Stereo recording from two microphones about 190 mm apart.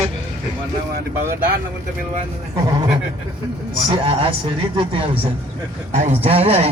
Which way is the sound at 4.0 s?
30° right (ahead or behind).